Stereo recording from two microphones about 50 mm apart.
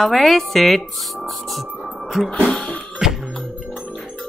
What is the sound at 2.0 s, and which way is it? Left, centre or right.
Music, centre.